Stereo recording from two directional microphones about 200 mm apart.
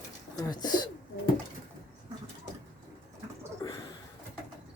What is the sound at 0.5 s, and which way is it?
Speech, 20° left (ahead or behind).